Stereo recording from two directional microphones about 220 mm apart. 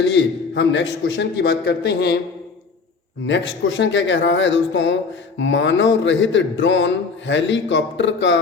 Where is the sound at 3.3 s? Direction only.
55° left (ahead or behind).